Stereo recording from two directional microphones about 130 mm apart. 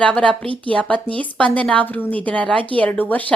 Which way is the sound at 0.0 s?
10° left (ahead or behind).